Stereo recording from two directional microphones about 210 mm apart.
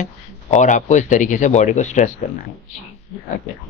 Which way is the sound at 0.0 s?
35° left (ahead or behind).